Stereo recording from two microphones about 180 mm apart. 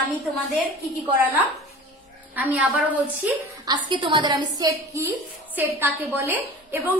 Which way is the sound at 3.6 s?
25° right (ahead or behind).